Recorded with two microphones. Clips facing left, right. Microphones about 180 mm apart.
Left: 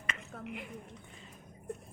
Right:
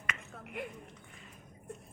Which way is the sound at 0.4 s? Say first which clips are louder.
Right 2 dB; 50° right (ahead or behind).